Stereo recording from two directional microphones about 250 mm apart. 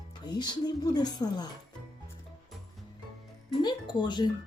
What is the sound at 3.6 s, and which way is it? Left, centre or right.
Speech, centre.